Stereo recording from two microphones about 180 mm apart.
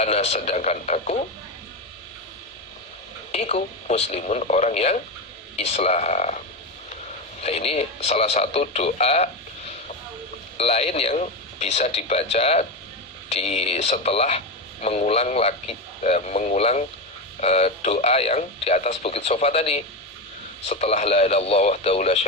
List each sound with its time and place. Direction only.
0.0 s speech: 35° left (ahead or behind)
3.3 s speech: 35° left (ahead or behind)
7.4 s speech: 35° left (ahead or behind)